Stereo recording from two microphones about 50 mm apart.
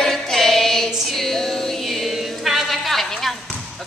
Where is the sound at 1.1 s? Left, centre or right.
Centre.